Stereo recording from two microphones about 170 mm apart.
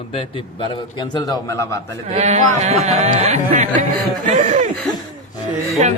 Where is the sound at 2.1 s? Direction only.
40° right (ahead or behind).